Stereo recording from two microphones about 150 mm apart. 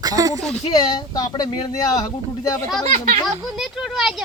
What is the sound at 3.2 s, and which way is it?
Speech, centre (ahead or behind).